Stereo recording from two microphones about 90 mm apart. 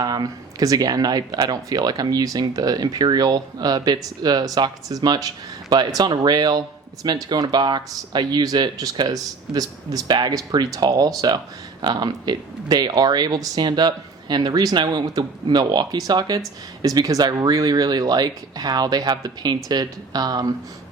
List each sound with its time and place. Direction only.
0.0 s speech: 50° right (ahead or behind)